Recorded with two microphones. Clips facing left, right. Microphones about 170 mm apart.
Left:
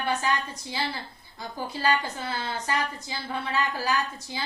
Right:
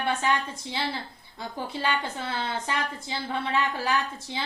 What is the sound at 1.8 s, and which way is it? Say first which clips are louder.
Speech: left 4 dB; 25° right (ahead or behind).